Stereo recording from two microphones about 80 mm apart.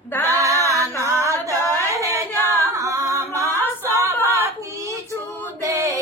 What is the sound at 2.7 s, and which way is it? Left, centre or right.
A capella, right.